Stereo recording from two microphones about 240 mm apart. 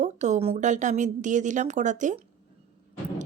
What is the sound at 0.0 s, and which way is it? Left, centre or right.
Speech, right.